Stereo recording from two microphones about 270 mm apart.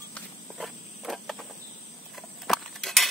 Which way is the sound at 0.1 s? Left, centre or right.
Centre.